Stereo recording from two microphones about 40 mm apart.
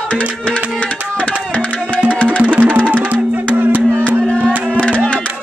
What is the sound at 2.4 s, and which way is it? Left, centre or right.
Music, right.